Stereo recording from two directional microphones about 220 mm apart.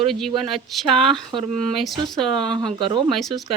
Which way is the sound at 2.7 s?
20° right (ahead or behind).